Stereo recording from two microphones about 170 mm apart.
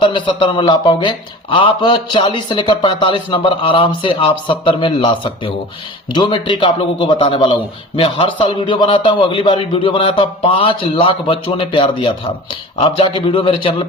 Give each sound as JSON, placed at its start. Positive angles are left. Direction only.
{"t": 0.0, "sound": "a man's voice", "side_deg": 30}